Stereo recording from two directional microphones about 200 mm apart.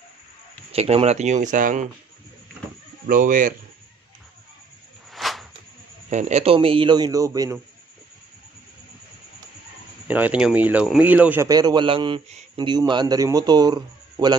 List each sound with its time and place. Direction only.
0.7 s speech: 30° right (ahead or behind)
3.1 s speech: 40° right (ahead or behind)
5.1 s a sound: centre (ahead or behind)
6.0 s speech: 35° right (ahead or behind); by 7.5 s 15° right (ahead or behind)
10.0 s speech: 10° right (ahead or behind)